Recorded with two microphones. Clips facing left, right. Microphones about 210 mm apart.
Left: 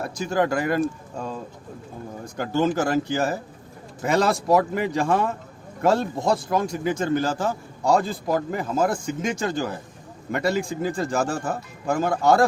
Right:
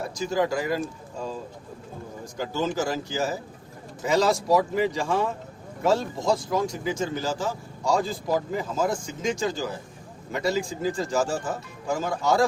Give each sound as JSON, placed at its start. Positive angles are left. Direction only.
{"t": 0.0, "sound": "speech", "side_deg": 60}
{"t": 2.2, "sound": "speech", "side_deg": 60}